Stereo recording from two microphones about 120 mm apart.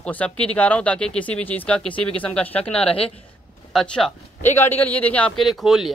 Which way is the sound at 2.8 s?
55° left (ahead or behind).